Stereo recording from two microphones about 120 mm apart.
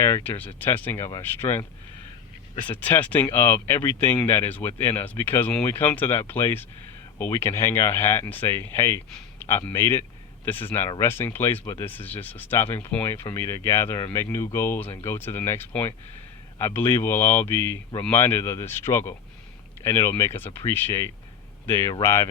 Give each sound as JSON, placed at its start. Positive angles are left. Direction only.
{"t": 0.2, "sound": "speech", "side_deg": 15}
{"t": 2.6, "sound": "speech", "side_deg": 15}
{"t": 11.6, "sound": "speech", "side_deg": 30}
{"t": 11.9, "sound": "speech", "side_deg": 15}
{"t": 13.2, "sound": "speech", "side_deg": 25}